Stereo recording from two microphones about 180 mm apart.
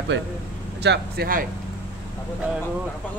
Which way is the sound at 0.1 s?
75° right (ahead or behind).